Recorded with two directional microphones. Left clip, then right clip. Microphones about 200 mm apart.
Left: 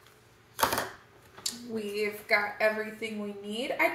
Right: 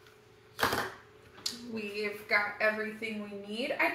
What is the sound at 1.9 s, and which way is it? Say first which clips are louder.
Speech: left 2 dB; 55° left (ahead or behind).